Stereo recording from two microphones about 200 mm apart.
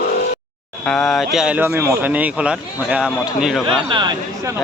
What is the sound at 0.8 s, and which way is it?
Speech, 5° left (ahead or behind).